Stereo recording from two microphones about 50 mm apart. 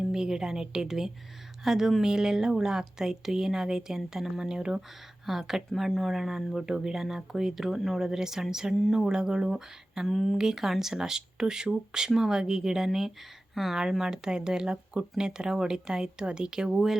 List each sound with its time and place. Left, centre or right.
0.1 s speech: centre
10.1 s speech: centre
10.3 s speech: centre